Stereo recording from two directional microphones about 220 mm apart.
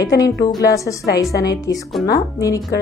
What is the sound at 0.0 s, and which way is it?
Speech, 15° left (ahead or behind).